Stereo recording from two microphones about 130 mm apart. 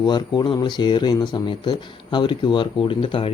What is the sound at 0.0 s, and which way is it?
Speech, 35° left (ahead or behind).